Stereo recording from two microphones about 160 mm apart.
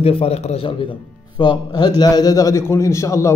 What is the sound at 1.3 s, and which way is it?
A man's voice, 25° left (ahead or behind).